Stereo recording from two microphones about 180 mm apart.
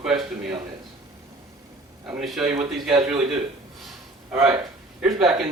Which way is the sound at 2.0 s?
5° right (ahead or behind).